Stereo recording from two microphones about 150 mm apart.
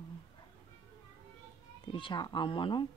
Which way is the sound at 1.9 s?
35° left (ahead or behind).